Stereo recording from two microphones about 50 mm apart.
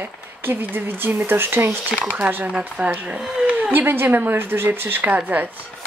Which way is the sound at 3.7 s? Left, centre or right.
Right.